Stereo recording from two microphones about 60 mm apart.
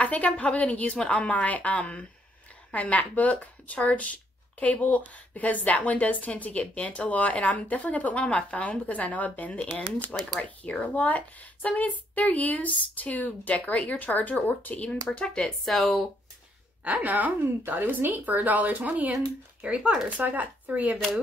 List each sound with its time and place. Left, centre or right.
0.0 s speech: left
15.6 s speech: centre
16.8 s a woman's voice: right